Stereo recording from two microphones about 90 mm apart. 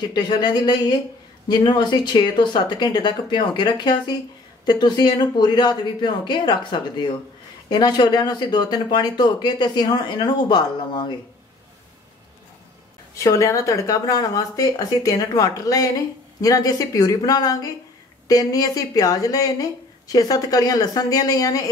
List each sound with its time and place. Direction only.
0.0 s a woman's voice: 50° left (ahead or behind)
13.2 s a woman's voice: 35° left (ahead or behind)